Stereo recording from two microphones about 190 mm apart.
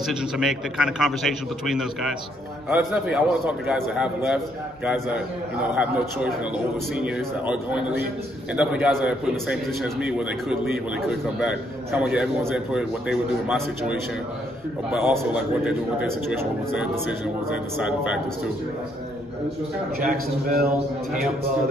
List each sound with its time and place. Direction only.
0.0 s a man's voice: centre (ahead or behind)
20.0 s a man's voice: 50° right (ahead or behind)